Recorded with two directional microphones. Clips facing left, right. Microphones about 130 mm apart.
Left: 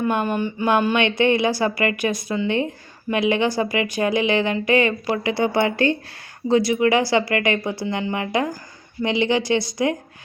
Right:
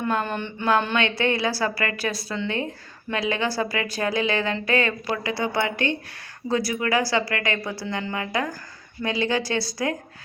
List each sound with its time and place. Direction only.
0.0 s a sound: 15° left (ahead or behind)
0.8 s speech: 15° left (ahead or behind); by 6.0 s 35° left (ahead or behind)
6.5 s speech: 25° left (ahead or behind)